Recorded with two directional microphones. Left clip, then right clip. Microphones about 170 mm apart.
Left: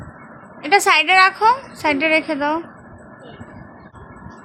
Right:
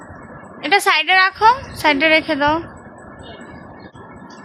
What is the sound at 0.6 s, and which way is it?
A woman's voice, 5° left (ahead or behind).